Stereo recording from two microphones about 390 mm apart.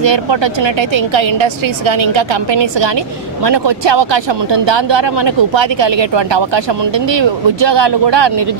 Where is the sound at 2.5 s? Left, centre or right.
Right.